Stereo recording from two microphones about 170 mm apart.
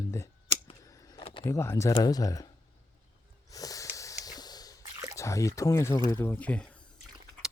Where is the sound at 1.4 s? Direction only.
15° left (ahead or behind).